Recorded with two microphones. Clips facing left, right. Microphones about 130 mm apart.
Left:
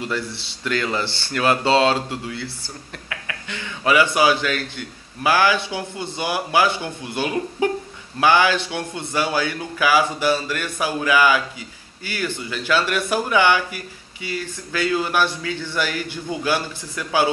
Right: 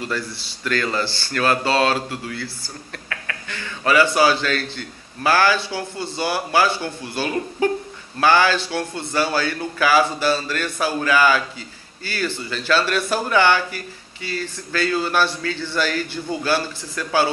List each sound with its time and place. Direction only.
0.0 s a man's voice: 20° left (ahead or behind)